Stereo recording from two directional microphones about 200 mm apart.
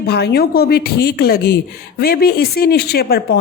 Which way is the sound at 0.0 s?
55° left (ahead or behind).